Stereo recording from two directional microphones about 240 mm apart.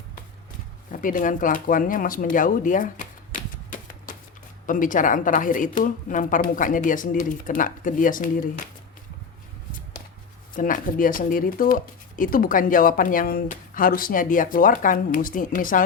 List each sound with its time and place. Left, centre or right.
0.9 s speech: left
3.3 s typewriter: left
4.6 s speech: left
10.5 s speech: left